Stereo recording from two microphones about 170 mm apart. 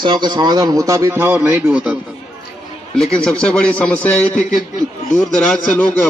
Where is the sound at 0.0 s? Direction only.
25° right (ahead or behind); by 2.0 s 10° right (ahead or behind).